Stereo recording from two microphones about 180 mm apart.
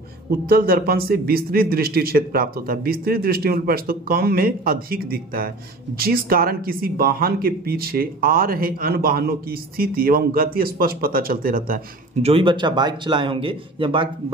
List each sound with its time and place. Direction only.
0.5 s speech: 55° right (ahead or behind)
12.2 s a man's voice: 30° right (ahead or behind)